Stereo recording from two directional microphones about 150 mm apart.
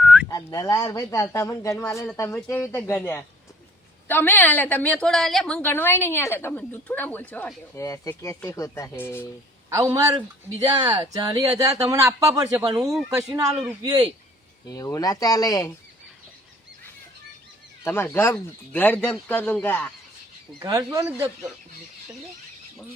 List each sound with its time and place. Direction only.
0.0 s telephone dialing: 5° right (ahead or behind)
0.3 s a man's voice: 25° left (ahead or behind)
7.8 s a man's voice: 20° left (ahead or behind)
9.9 s speech: 25° right (ahead or behind)
12.7 s speech: centre (ahead or behind)
13.1 s speech: 20° right (ahead or behind)
14.7 s a man's voice: 25° left (ahead or behind)
17.8 s a woman's voice: 15° left (ahead or behind)
20.6 s speech: 25° right (ahead or behind)
21.1 s speech: 10° right (ahead or behind)